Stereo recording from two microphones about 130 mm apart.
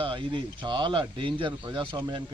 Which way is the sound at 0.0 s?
40° right (ahead or behind).